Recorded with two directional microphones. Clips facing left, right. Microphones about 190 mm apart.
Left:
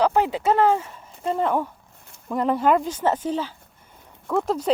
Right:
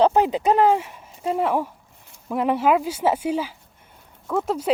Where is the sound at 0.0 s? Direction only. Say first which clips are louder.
Right 3 dB; 20° right (ahead or behind).